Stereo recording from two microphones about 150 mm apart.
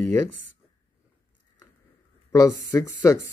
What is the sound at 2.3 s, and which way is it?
Speech, 20° left (ahead or behind).